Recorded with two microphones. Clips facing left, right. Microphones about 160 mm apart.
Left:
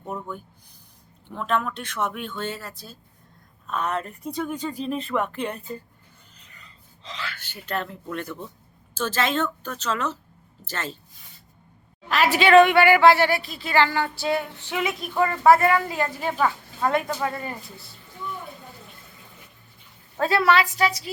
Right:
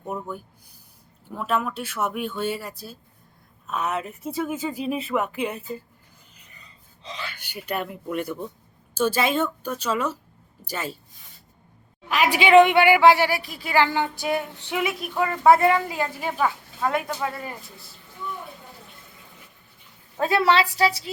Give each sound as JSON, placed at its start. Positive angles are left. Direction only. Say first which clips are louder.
{"t": 0.0, "sound": "a sound", "louder": "right 1 dB", "side_deg": -5}
{"t": 1.3, "sound": "a woman's voice", "louder": "even", "side_deg": -5}
{"t": 12.0, "sound": "a woman's voice", "louder": "left 1 dB", "side_deg": -10}
{"t": 14.9, "sound": "a woman's voice", "louder": "left 2 dB", "side_deg": -5}
{"t": 15.4, "sound": "a woman's voice", "louder": "right 1 dB", "side_deg": -20}
{"t": 20.1, "sound": "a woman's voice", "louder": "even", "side_deg": -20}